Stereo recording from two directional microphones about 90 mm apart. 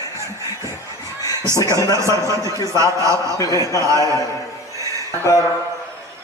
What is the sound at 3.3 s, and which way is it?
Speech, 40° left (ahead or behind).